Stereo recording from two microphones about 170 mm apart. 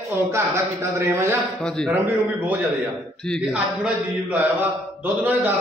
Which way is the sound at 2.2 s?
10° right (ahead or behind).